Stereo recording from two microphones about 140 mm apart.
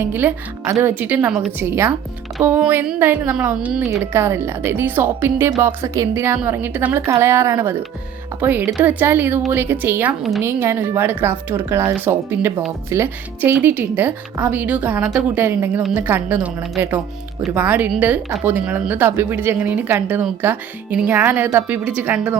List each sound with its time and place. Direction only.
0.0 s a woman's voice: 15° right (ahead or behind)